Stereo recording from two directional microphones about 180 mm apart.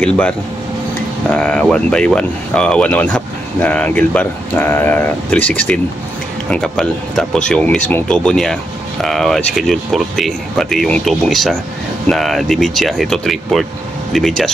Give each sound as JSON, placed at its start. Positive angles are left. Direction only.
{"t": 0.0, "sound": "speech", "side_deg": 5}
{"t": 1.3, "sound": "speech", "side_deg": 5}